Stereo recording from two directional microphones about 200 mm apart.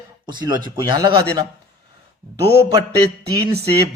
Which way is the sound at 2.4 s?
55° right (ahead or behind).